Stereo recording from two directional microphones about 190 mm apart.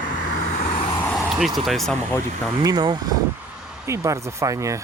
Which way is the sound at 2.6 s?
20° right (ahead or behind).